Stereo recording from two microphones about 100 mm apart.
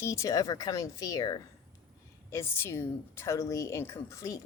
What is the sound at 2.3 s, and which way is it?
A woman's voice, 25° left (ahead or behind).